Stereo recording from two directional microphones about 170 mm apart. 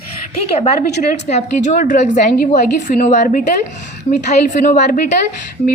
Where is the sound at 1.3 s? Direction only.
45° left (ahead or behind).